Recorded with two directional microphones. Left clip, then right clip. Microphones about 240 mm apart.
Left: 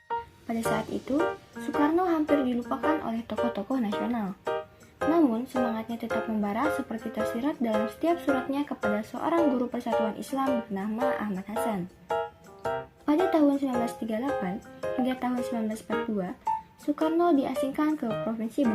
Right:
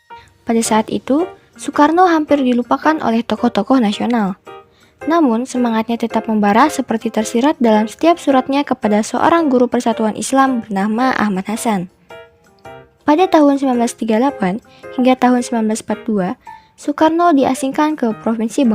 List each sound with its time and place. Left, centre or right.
0.4 s speech: right
13.1 s speech: right
16.8 s speech: right